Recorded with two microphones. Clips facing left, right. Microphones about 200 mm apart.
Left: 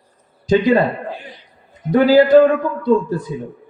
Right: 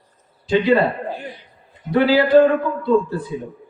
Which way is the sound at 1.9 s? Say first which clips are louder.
Left 3 dB; 45° left (ahead or behind).